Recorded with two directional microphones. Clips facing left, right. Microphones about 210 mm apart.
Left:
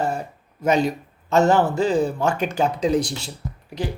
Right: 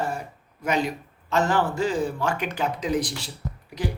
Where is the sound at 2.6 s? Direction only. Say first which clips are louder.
Left 6 dB; 30° left (ahead or behind).